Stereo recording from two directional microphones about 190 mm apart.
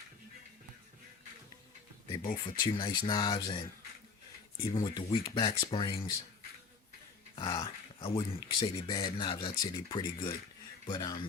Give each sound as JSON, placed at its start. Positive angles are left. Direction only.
{"t": 2.2, "sound": "speech", "side_deg": 25}
{"t": 4.6, "sound": "speech", "side_deg": 20}
{"t": 7.3, "sound": "speech", "side_deg": 25}